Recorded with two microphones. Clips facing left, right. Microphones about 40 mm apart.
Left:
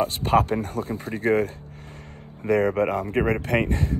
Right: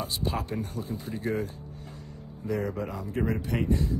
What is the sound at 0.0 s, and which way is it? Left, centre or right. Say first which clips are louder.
Speech: left 11 dB; left.